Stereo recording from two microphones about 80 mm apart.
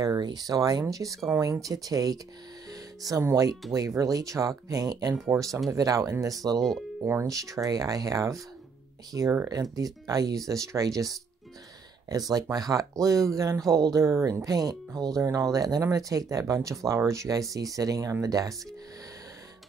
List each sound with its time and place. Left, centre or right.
0.0 s speech: right
2.7 s music: right
3.7 s speech: right
5.3 s speech: right
9.1 s speech: right
9.5 s speech: right